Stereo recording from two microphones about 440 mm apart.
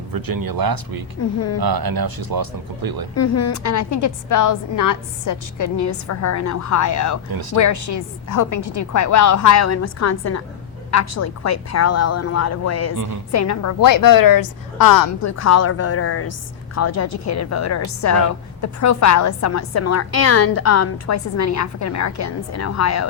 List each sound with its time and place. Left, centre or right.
0.1 s speech: right
3.2 s a woman's voice: left